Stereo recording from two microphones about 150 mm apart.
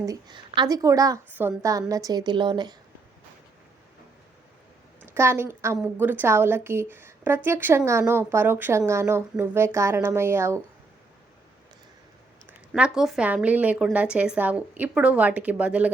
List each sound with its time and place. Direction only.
0.0 s speech: 25° right (ahead or behind)
5.0 s a woman's voice: 15° right (ahead or behind)
12.5 s a woman's voice: 5° right (ahead or behind)